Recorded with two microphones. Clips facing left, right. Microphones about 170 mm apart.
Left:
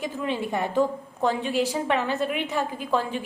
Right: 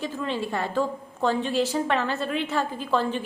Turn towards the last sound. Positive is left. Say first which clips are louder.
# right 1 dB
turn(degrees=10)  # may be behind; listen again after turning